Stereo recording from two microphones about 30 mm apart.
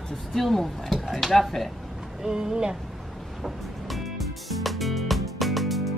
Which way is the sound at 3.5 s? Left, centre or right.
Centre.